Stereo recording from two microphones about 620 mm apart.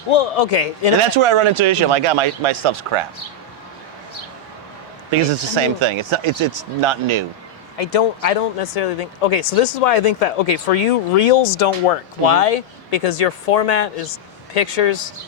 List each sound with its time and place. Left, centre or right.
0.1 s speech: left
1.1 s speech: right
5.2 s speech: right
7.8 s speech: left